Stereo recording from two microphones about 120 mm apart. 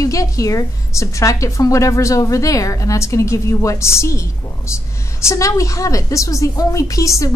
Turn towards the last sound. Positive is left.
turn(degrees=25)  # may be behind; listen again after turning